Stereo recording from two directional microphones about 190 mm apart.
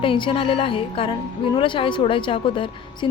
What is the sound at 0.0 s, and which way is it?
A woman's voice, 25° left (ahead or behind).